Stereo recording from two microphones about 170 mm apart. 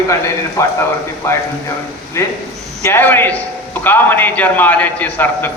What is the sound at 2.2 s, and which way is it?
A man's voice, 15° left (ahead or behind).